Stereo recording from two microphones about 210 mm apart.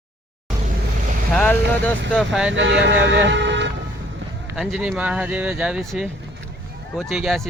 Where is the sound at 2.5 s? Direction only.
60° right (ahead or behind).